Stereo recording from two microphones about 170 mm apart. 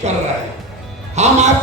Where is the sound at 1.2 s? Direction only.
40° right (ahead or behind).